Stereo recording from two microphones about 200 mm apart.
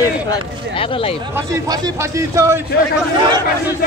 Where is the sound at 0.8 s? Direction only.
25° left (ahead or behind).